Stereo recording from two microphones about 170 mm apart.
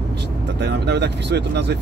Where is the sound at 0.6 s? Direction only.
85° right.